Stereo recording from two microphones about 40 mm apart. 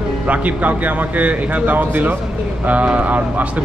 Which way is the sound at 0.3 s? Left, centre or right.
Right.